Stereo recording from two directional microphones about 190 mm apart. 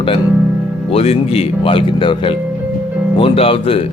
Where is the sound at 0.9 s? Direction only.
30° left (ahead or behind).